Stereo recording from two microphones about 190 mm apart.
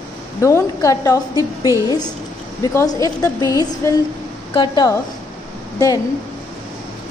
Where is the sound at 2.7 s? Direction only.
15° left (ahead or behind).